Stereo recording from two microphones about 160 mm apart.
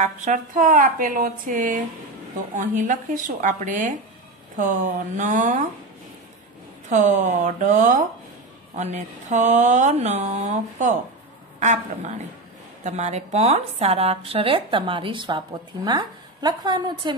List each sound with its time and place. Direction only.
0.0 s a woman's voice: 50° right (ahead or behind)
6.9 s a woman's voice: 50° right (ahead or behind); by 17.1 s 25° right (ahead or behind)